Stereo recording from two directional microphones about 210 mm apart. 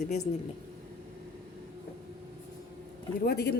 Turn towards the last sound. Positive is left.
turn(degrees=50)  # may be behind; listen again after turning